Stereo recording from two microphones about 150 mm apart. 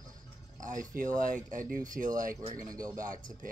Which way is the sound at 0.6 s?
60° right (ahead or behind).